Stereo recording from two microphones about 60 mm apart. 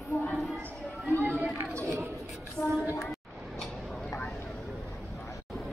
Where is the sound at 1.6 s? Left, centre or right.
Right.